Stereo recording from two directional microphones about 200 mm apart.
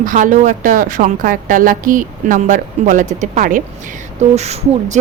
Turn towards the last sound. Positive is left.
turn(degrees=-35)  # may be behind; listen again after turning